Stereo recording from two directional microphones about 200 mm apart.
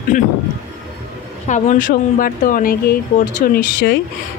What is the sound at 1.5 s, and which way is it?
Speech, 40° left (ahead or behind).